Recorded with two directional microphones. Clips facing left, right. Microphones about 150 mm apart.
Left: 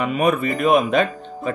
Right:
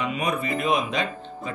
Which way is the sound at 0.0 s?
55° left (ahead or behind).